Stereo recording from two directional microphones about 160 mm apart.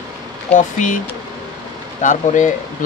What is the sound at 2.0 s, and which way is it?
Speech, 50° left (ahead or behind).